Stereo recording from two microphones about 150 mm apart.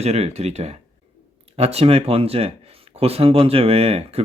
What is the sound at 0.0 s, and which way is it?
Speech, 45° right (ahead or behind).